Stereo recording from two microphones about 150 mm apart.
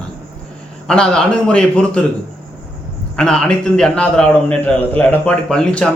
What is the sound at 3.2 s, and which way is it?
A man's voice, 5° left (ahead or behind).